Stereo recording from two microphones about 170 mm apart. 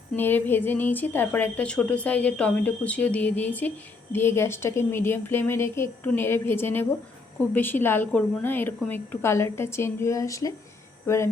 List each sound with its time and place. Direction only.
0.1 s a woman's voice: 10° left (ahead or behind)